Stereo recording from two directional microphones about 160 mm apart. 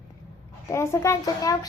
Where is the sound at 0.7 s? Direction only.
20° left (ahead or behind).